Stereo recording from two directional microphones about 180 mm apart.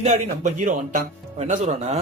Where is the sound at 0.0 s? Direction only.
45° right (ahead or behind).